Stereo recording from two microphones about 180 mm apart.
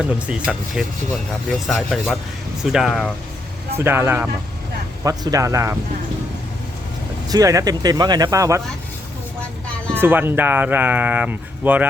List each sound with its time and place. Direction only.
0.0 s speech: 5° right (ahead or behind)
7.3 s speech: 20° right (ahead or behind)
9.9 s speech: 10° right (ahead or behind)